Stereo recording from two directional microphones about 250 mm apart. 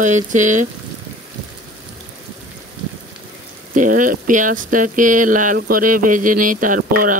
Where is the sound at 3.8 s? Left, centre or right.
Right.